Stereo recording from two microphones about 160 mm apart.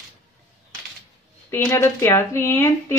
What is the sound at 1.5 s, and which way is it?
A woman's voice, 15° left (ahead or behind).